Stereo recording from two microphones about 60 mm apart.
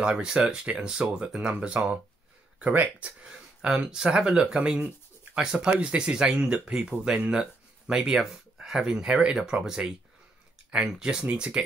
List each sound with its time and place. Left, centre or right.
0.0 s speech: centre
4.6 s a sound: right
5.4 s speech: centre